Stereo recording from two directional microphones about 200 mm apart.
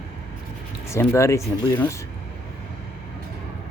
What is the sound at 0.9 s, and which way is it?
Speech, 15° left (ahead or behind).